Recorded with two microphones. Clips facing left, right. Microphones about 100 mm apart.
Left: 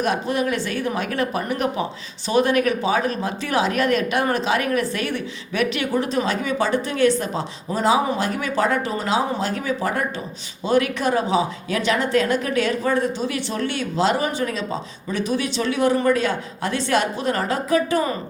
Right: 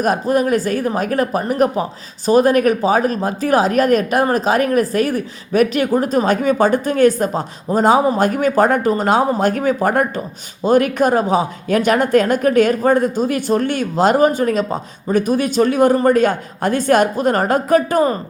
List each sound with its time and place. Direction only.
0.0 s speech: 40° right (ahead or behind)